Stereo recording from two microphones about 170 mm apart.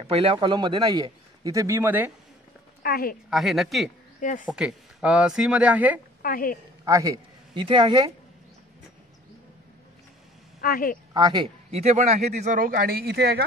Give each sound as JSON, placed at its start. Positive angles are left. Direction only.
{"t": 0.0, "sound": "speech", "side_deg": -35}
{"t": 2.8, "sound": "a woman's voice", "side_deg": 60}
{"t": 3.3, "sound": "speech", "side_deg": 0}
{"t": 4.2, "sound": "speech", "side_deg": 50}
{"t": 4.5, "sound": "speech", "side_deg": -5}
{"t": 6.2, "sound": "a woman's voice", "side_deg": 55}
{"t": 6.8, "sound": "a man's voice", "side_deg": -20}
{"t": 10.6, "sound": "a woman's voice", "side_deg": 60}
{"t": 11.1, "sound": "speech", "side_deg": -25}
{"t": 11.7, "sound": "speech", "side_deg": -40}